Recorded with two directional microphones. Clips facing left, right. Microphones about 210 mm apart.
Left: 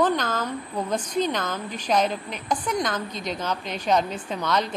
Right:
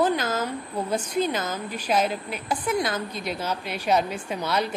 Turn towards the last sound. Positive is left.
turn(degrees=-10)  # may be behind; listen again after turning